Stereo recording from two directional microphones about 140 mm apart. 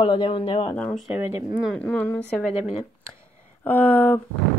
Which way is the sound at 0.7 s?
5° left (ahead or behind).